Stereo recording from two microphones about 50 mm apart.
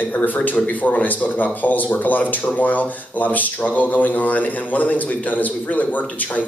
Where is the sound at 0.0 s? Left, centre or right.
Left.